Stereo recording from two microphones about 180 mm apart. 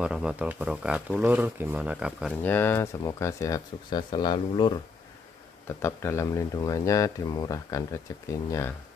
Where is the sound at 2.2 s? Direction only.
10° left (ahead or behind).